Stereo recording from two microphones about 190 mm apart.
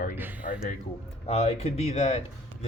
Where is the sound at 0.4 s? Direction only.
45° left (ahead or behind).